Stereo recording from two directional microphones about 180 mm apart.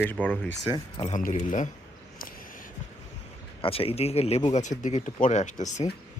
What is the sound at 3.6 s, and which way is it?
Speech, 30° left (ahead or behind).